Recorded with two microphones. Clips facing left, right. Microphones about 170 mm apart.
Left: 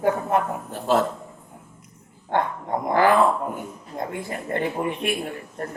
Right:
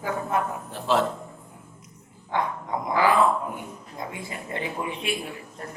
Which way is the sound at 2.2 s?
55° left (ahead or behind).